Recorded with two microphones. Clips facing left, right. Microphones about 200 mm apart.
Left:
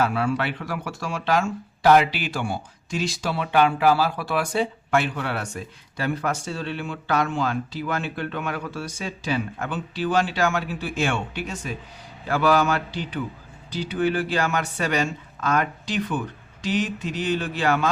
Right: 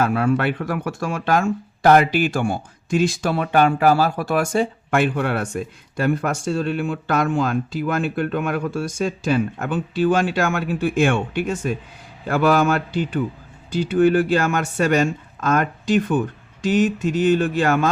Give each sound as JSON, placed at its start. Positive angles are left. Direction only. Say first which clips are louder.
{"t": 0.0, "sound": "speech", "louder": "right 4 dB", "side_deg": -50}